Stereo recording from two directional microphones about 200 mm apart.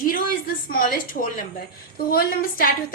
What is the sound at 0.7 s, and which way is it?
A woman's voice, 45° left (ahead or behind).